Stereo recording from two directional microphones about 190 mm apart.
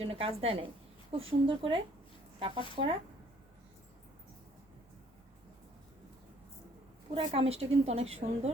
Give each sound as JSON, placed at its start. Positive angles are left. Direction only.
{"t": 0.0, "sound": "a woman's voice", "side_deg": -30}
{"t": 7.3, "sound": "a woman's voice", "side_deg": -30}